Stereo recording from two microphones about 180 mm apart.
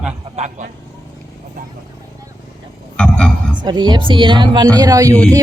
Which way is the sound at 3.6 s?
25° right (ahead or behind).